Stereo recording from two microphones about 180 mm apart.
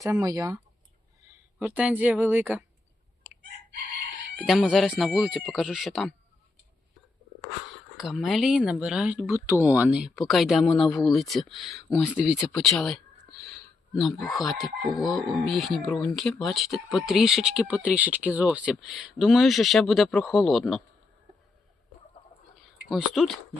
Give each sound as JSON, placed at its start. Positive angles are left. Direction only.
{"t": 0.0, "sound": "speech", "side_deg": -20}
{"t": 1.5, "sound": "speech", "side_deg": -5}
{"t": 4.4, "sound": "speech", "side_deg": 0}
{"t": 7.9, "sound": "speech", "side_deg": 0}
{"t": 22.9, "sound": "speech", "side_deg": 0}